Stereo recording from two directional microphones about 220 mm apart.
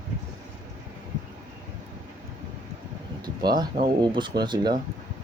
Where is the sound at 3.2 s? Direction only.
20° right (ahead or behind).